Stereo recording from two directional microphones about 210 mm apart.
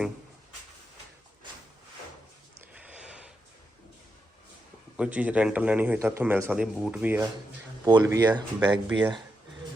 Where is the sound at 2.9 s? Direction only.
5° right (ahead or behind).